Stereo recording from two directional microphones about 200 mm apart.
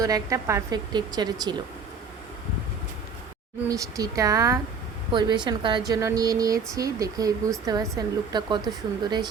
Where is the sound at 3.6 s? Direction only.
15° right (ahead or behind).